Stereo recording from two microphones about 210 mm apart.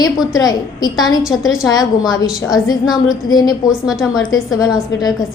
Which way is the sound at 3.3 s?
20° left (ahead or behind).